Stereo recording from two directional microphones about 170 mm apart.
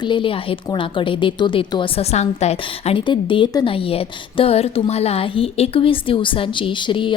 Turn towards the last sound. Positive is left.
turn(degrees=30)  # may be behind; listen again after turning